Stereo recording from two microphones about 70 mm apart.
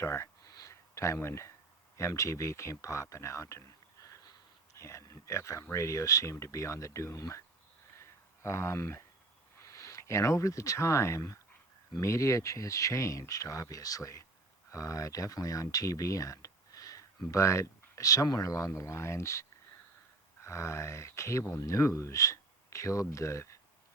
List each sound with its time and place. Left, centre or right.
0.0 s speech: left
0.4 s a sound: left
2.0 s speech: left
4.8 s speech: left
7.9 s a sound: left
9.6 s speech: left